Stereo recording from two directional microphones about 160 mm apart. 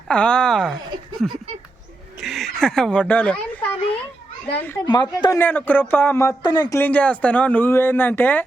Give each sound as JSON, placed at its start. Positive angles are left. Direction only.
{"t": 0.1, "sound": "speech", "side_deg": 5}
{"t": 2.2, "sound": "speech", "side_deg": 0}
{"t": 4.9, "sound": "speech", "side_deg": 25}
{"t": 5.4, "sound": "speech", "side_deg": 10}